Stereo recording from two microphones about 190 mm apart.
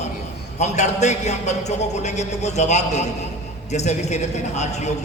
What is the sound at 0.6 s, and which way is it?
A man's voice, 35° left (ahead or behind).